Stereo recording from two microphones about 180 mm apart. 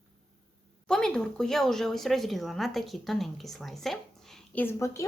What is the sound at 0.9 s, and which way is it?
A woman's voice, 5° left (ahead or behind).